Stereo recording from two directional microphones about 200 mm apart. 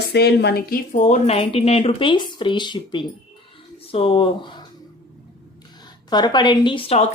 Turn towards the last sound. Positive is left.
turn(degrees=25)  # may be behind; listen again after turning